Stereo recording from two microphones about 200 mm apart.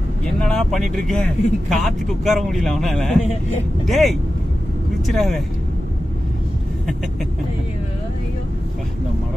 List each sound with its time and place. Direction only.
0.2 s speech: 5° left (ahead or behind)